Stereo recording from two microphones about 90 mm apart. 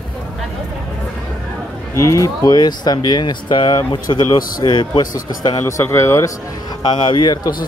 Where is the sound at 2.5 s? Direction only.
55° left (ahead or behind).